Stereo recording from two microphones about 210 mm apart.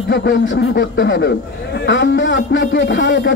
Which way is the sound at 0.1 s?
60° left (ahead or behind).